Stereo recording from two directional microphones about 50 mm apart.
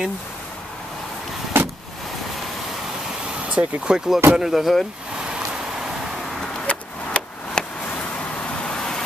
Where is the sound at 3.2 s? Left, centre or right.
Right.